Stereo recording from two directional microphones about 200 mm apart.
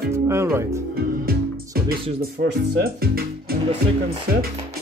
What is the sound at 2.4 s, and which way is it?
Speech, 50° right (ahead or behind).